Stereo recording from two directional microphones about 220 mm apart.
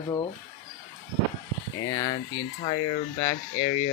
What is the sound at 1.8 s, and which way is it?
Speech, 15° left (ahead or behind).